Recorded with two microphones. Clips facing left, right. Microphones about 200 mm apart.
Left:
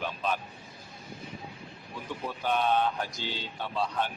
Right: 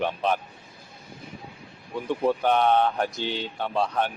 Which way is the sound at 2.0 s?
65° right (ahead or behind).